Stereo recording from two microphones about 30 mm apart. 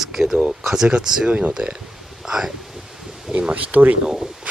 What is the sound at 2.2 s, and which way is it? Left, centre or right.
Speech, centre.